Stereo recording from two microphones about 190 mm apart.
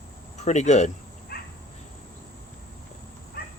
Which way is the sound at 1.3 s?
55° left (ahead or behind).